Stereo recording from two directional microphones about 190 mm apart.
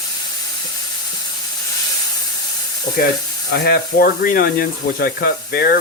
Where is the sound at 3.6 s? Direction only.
50° left (ahead or behind).